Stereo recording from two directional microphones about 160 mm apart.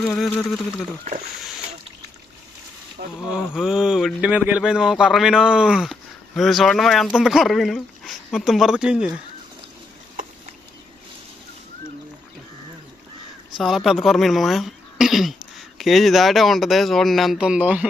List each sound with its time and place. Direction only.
0.3 s speech: 5° left (ahead or behind)
3.0 s speech: 60° right (ahead or behind)
3.5 s speech: 5° right (ahead or behind)
13.6 s speech: centre (ahead or behind)